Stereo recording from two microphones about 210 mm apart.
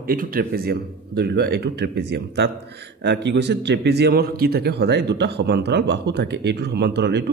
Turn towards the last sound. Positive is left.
turn(degrees=-55)  # may be behind; listen again after turning